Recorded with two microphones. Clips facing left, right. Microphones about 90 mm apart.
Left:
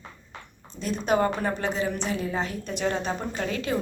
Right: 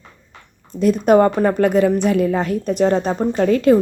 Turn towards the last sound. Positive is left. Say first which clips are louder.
# right 15 dB
turn(degrees=-45)  # may be behind; listen again after turning